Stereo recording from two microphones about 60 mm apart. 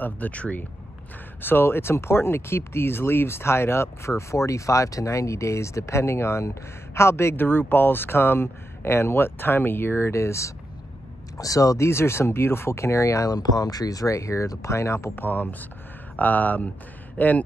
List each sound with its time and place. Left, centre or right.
0.0 s speech: left
1.4 s speech: left
11.3 s speech: left
15.1 s speech: left